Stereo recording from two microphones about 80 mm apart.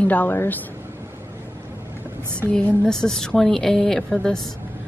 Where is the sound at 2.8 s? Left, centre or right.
Centre.